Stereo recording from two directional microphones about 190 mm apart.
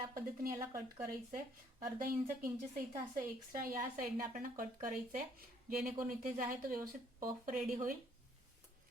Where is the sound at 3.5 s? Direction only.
50° right (ahead or behind).